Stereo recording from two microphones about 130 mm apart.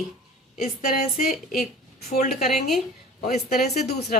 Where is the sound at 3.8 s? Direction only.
55° left (ahead or behind).